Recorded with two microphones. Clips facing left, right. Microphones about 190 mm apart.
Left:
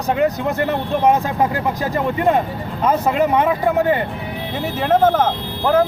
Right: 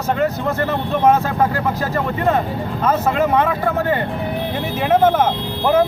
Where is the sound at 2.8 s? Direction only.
15° left (ahead or behind).